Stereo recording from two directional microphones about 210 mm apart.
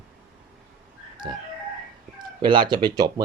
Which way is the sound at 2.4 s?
20° right (ahead or behind).